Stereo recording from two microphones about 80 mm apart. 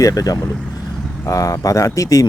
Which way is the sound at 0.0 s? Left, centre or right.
Left.